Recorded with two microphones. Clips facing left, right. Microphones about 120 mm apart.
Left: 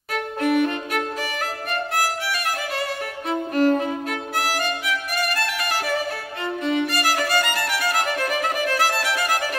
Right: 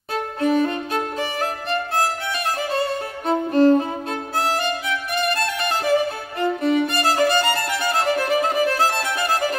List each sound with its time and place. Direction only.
0.1 s violin: 30° right (ahead or behind)
2.7 s music: 30° right (ahead or behind)
4.4 s violin: 25° right (ahead or behind)
6.6 s music: 40° right (ahead or behind)
6.9 s music: 25° right (ahead or behind)